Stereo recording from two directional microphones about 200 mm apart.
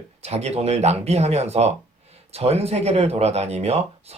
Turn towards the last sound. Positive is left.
turn(degrees=-30)  # may be behind; listen again after turning